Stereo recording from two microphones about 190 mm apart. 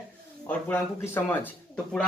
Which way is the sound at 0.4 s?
10° left (ahead or behind).